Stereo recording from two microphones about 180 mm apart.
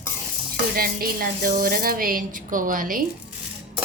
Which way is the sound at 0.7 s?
55° right (ahead or behind).